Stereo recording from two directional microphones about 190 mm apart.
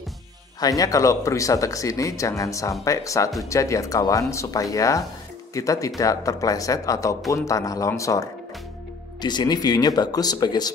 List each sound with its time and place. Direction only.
0.6 s speech: 20° left (ahead or behind)